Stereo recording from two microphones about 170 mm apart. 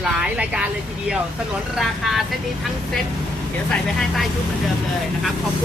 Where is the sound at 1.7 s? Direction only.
Centre (ahead or behind).